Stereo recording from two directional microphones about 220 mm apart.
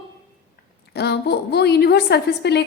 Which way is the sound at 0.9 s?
50° left (ahead or behind).